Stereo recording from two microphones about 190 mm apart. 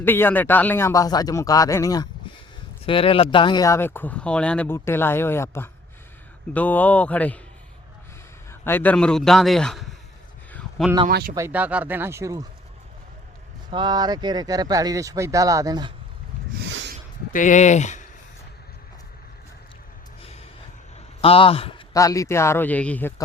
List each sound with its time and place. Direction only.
0.0 s speech: 10° left (ahead or behind)
2.8 s speech: 30° left (ahead or behind); by 7.3 s 10° left (ahead or behind)
8.4 s a man's voice: 10° left (ahead or behind)
10.5 s a sound: centre (ahead or behind)
11.1 s speech: 50° right (ahead or behind)
11.3 s speech: 10° right (ahead or behind)
13.7 s speech: 25° right (ahead or behind)
16.6 s a sound: 70° right (ahead or behind)
17.3 s speech: 40° left (ahead or behind)
21.2 s a man's voice: 30° left (ahead or behind)
21.9 s speech: 15° left (ahead or behind)